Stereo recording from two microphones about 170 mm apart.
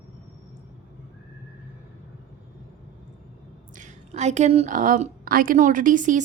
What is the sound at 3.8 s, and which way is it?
A woman's voice, 45° right (ahead or behind).